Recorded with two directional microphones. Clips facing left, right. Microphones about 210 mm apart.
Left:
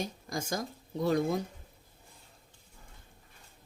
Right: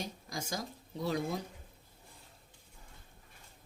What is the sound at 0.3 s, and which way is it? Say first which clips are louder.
Speech: left 5 dB; 50° left (ahead or behind).